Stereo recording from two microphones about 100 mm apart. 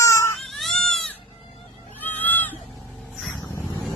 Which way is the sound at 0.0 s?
30° left (ahead or behind).